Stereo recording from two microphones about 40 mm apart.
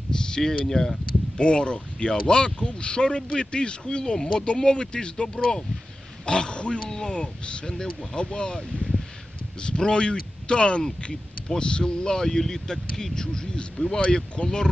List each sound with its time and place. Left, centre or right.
0.1 s speech: centre
1.3 s speech: left
13.9 s speech: left